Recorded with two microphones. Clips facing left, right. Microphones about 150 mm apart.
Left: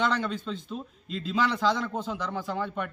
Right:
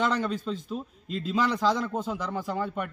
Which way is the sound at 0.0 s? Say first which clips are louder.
Right 1 dB; 5° right (ahead or behind).